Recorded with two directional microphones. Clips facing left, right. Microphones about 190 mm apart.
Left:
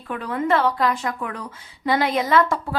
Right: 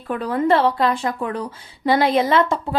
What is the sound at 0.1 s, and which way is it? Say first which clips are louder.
A woman's voice: right 4 dB; 35° right (ahead or behind).